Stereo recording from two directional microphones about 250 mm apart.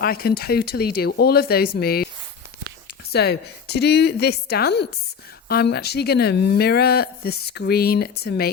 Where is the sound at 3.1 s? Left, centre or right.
Left.